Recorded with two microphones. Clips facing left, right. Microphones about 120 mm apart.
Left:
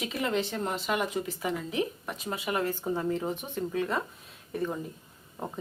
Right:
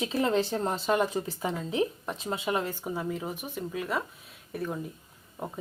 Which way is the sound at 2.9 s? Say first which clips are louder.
Left 3 dB; 5° right (ahead or behind).